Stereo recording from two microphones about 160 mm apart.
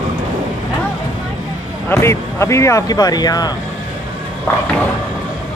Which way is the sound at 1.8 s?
15° left (ahead or behind).